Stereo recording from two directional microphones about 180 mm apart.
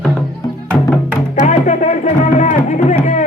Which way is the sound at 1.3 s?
40° left (ahead or behind).